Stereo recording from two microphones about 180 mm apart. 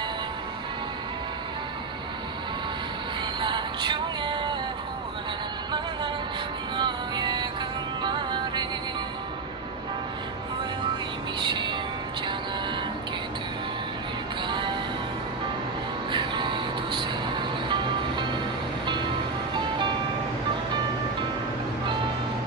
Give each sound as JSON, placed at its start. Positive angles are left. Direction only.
{"t": 3.3, "sound": "music", "side_deg": -25}
{"t": 6.8, "sound": "music", "side_deg": -25}
{"t": 11.3, "sound": "music", "side_deg": -25}
{"t": 14.5, "sound": "music", "side_deg": -25}
{"t": 16.1, "sound": "music", "side_deg": -25}